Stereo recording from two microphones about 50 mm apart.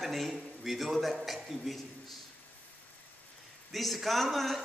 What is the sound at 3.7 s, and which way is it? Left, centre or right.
Speech, centre.